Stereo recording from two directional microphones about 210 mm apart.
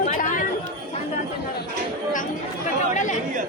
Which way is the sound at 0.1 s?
40° left (ahead or behind).